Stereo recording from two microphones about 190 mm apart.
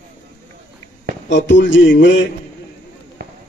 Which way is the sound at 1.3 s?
70° left (ahead or behind).